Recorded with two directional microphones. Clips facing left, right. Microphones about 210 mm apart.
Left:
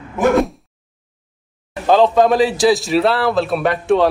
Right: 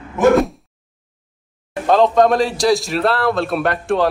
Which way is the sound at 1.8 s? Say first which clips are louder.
Left 1 dB; centre (ahead or behind).